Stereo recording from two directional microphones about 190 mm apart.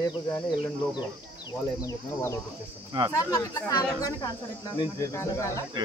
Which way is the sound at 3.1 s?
20° left (ahead or behind).